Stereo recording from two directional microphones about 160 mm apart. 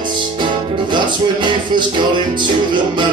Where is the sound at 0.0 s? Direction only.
30° right (ahead or behind).